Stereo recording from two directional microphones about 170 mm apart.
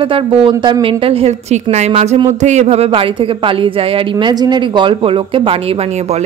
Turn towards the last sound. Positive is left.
turn(degrees=-30)  # may be behind; listen again after turning